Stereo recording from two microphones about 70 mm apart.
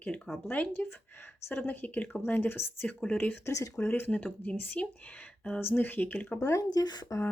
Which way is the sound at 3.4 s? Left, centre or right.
Left.